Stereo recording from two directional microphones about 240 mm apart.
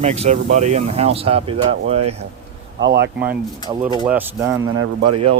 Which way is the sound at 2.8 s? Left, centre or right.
Right.